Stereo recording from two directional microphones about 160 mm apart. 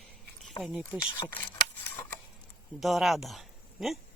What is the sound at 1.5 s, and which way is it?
Scissors, 15° left (ahead or behind).